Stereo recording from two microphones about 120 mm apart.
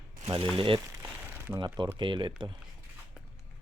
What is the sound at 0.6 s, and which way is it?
Speech, 45° right (ahead or behind).